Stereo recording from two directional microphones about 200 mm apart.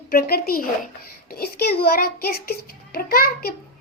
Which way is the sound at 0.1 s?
50° left (ahead or behind).